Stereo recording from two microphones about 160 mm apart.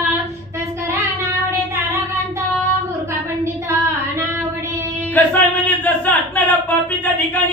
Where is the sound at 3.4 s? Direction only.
15° right (ahead or behind).